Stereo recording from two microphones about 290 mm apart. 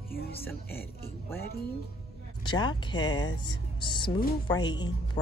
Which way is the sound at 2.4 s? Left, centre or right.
Centre.